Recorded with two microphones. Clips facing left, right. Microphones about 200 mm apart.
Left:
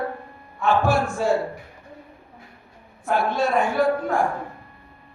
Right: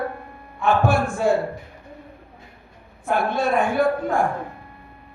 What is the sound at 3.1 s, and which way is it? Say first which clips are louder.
Speech: even; 55° right (ahead or behind).